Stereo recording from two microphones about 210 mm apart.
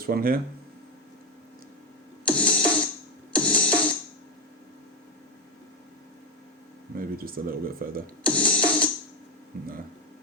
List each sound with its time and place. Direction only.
0.0 s speech: 45° right (ahead or behind)
2.2 s music: 5° left (ahead or behind)
6.9 s speech: 45° right (ahead or behind)
8.2 s music: 5° left (ahead or behind)